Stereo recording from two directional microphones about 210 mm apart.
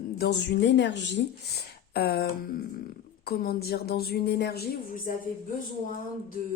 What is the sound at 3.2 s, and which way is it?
Speech, 45° left (ahead or behind).